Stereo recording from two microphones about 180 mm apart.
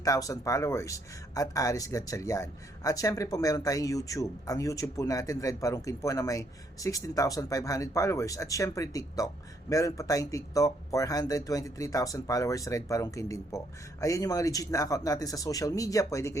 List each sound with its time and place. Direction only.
0.0 s speech: 20° left (ahead or behind)